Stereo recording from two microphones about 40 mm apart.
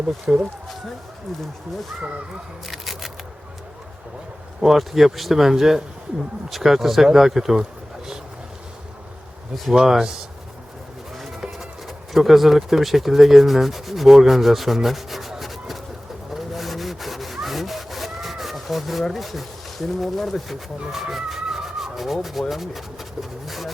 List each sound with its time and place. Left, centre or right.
0.3 s speech: right
2.6 s a sound: centre
4.6 s speech: centre
9.7 s speech: centre
11.2 s a sound: centre
12.1 s rub: centre
16.3 s sawing: centre
19.1 s rub: centre
20.9 s speech: centre
23.5 s vehicle: centre